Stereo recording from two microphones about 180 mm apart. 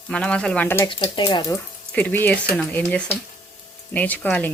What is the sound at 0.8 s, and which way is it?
Speech, 25° left (ahead or behind).